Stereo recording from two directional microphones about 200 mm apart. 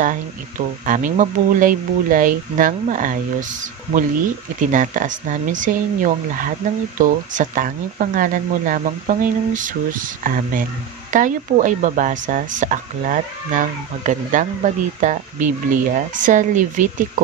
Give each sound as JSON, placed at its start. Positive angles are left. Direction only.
{"t": 0.8, "sound": "speech", "side_deg": -40}
{"t": 4.6, "sound": "speech", "side_deg": -40}